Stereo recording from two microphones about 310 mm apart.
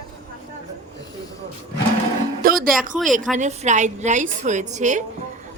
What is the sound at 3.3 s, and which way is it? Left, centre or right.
A woman's voice, right.